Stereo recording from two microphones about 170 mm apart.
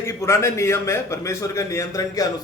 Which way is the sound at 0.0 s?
15° left (ahead or behind).